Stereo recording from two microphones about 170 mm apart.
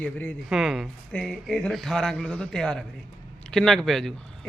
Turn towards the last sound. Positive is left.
turn(degrees=0)  # may be behind; listen again after turning